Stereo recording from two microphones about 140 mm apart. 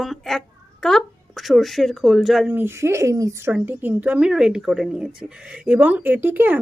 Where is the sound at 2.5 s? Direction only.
15° right (ahead or behind).